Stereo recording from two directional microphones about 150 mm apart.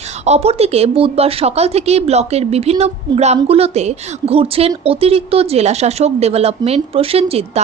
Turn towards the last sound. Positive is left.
turn(degrees=-40)  # may be behind; listen again after turning